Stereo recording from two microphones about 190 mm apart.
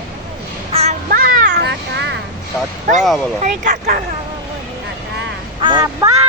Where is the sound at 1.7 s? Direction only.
65° right (ahead or behind).